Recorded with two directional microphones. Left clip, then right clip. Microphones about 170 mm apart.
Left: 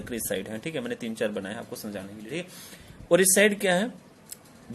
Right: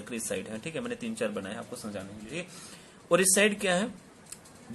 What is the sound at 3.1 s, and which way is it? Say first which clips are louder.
Speech: left 4 dB; 25° left (ahead or behind).